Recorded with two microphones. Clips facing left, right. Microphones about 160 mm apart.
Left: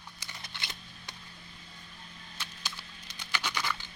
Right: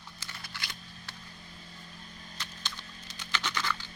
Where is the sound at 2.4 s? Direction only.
10° left (ahead or behind).